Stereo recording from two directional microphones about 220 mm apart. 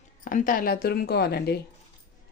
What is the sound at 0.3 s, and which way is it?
Speech, 40° left (ahead or behind).